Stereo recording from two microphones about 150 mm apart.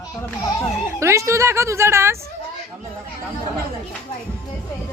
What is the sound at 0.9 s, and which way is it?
A woman's voice, 20° right (ahead or behind).